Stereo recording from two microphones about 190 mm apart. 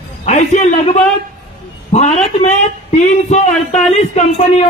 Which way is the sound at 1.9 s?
35° left (ahead or behind).